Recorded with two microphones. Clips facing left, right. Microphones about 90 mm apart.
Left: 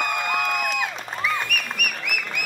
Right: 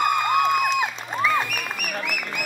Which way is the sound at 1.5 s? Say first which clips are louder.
Left 2 dB; 60° left (ahead or behind).